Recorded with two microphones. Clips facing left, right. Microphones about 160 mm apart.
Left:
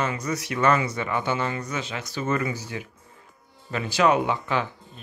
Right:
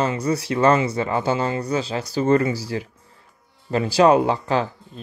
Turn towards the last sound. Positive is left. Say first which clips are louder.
# right 5 dB
turn(degrees=-35)  # may be behind; listen again after turning